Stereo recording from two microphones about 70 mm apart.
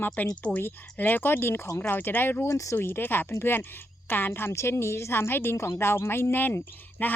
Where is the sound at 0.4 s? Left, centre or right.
Left.